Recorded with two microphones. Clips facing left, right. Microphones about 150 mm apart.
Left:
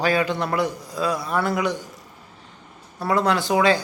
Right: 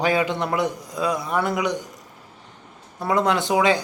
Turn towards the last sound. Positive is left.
turn(degrees=-20)  # may be behind; listen again after turning